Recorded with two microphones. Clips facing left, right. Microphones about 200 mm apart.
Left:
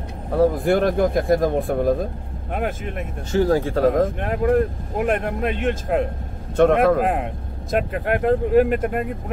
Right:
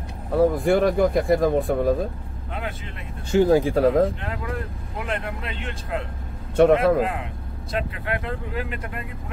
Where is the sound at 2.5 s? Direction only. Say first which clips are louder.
Left 7 dB; 50° left (ahead or behind).